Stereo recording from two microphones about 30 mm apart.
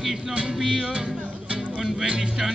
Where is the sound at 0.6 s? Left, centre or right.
Right.